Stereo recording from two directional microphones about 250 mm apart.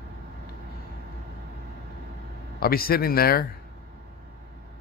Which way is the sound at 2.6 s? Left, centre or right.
Left.